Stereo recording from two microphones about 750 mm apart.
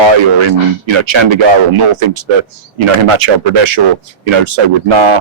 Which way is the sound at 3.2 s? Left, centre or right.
Right.